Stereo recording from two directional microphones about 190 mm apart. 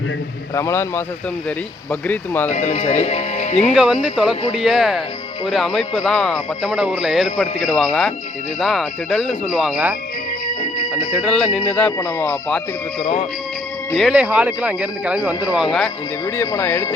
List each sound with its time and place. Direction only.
0.5 s speech: 15° left (ahead or behind)
2.5 s speech: 40° left (ahead or behind)
3.7 s speech: 5° right (ahead or behind)
10.6 s music: 40° left (ahead or behind)
11.1 s speech: 5° left (ahead or behind)
13.9 s speech: centre (ahead or behind)
16.2 s speech: 15° left (ahead or behind)